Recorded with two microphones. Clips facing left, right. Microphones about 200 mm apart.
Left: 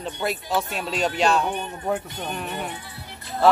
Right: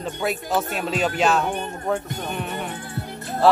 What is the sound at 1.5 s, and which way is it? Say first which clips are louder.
Speech: right 2 dB; 45° right (ahead or behind).